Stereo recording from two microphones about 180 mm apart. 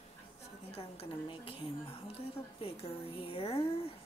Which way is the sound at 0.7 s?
30° left (ahead or behind).